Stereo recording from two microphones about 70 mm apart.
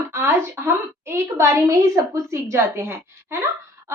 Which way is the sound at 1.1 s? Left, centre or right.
Right.